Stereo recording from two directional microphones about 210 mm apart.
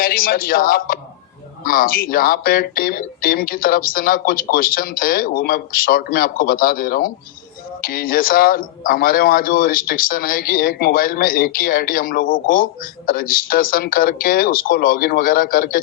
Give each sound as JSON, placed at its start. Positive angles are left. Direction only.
{"t": 0.0, "sound": "a man's voice", "side_deg": 45}